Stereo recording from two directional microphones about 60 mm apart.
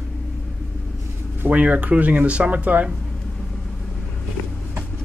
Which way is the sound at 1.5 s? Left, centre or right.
Right.